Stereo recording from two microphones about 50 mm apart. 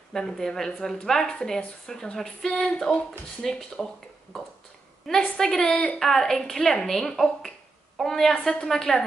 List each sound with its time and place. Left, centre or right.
0.1 s a woman's voice: centre
5.9 s speech: centre